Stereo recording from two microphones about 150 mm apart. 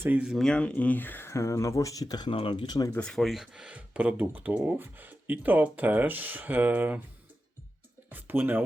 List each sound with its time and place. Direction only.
0.0 s speech: 10° right (ahead or behind); by 2.9 s 25° left (ahead or behind)
2.9 s speech: 5° left (ahead or behind); by 7.0 s 10° right (ahead or behind)
8.1 s speech: 15° right (ahead or behind)